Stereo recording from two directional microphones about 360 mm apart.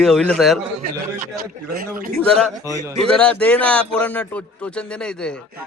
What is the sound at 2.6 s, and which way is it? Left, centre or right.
Speech, centre.